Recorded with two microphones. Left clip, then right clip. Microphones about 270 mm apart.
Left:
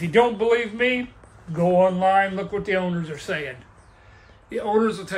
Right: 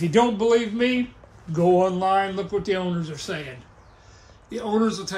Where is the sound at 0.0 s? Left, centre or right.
Right.